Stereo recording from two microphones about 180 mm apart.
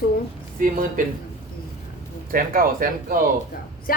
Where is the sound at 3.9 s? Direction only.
55° left (ahead or behind).